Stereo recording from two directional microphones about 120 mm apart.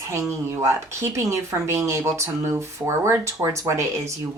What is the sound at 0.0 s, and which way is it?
Speech, 25° right (ahead or behind).